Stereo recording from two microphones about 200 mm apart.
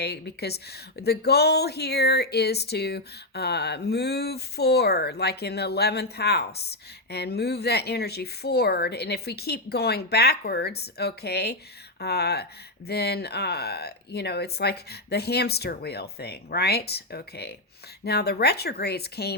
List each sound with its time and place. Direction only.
0.0 s speech: 55° left (ahead or behind)